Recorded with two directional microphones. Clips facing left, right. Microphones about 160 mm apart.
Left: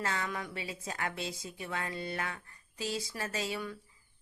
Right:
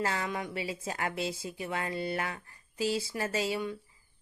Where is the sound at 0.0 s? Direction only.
30° right (ahead or behind).